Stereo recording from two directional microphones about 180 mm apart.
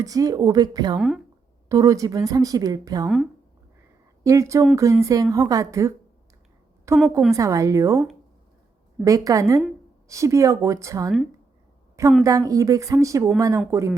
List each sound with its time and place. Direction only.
0.0 s speech: 20° right (ahead or behind)
0.9 s speech: centre (ahead or behind)
1.7 s speech: 20° right (ahead or behind)
4.2 s speech: 15° right (ahead or behind)
9.0 s speech: 20° right (ahead or behind)
12.2 s speech: 20° right (ahead or behind)